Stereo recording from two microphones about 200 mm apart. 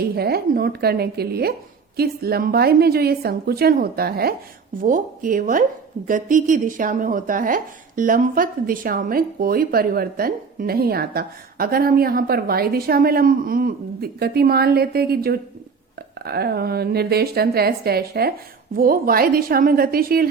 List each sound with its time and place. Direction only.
0.0 s speech: 50° right (ahead or behind)